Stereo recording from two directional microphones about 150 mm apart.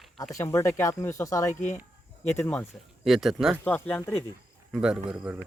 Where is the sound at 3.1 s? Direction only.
Centre (ahead or behind).